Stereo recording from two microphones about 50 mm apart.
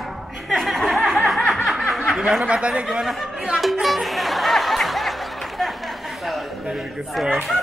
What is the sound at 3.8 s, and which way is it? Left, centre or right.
Music, centre.